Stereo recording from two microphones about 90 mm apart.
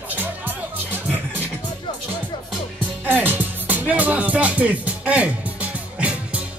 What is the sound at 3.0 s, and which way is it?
Music, 20° right (ahead or behind).